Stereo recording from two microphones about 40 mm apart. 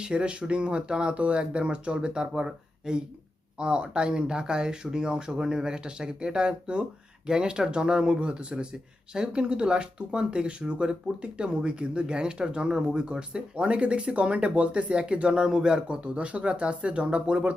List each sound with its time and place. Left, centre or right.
0.0 s speech: right